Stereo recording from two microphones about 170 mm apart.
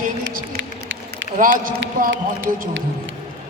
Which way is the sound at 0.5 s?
90° right.